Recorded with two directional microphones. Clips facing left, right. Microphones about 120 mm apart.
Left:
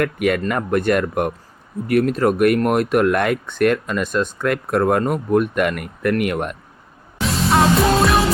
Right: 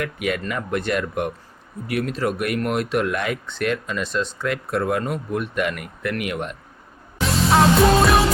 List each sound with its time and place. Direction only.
0.0 s speech: 50° left (ahead or behind)
7.2 s music: centre (ahead or behind)